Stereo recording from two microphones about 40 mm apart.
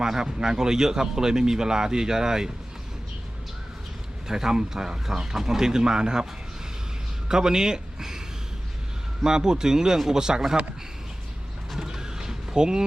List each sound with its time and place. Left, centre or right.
0.0 s speech: centre
4.3 s speech: centre
7.3 s a man's voice: centre
9.2 s speech: centre
11.8 s a sound: centre